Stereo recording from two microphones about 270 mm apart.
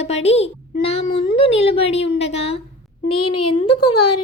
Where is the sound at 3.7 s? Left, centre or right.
Left.